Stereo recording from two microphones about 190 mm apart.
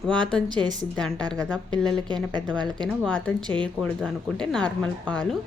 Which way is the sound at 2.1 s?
25° right (ahead or behind).